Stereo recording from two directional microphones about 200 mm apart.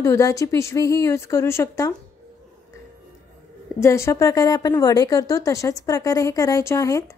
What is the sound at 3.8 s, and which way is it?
Speech, 15° left (ahead or behind).